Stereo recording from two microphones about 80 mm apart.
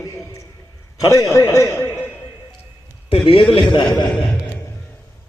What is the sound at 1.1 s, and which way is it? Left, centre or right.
Speech, left.